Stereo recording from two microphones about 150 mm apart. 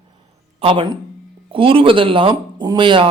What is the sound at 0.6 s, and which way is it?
Speech, 35° right (ahead or behind).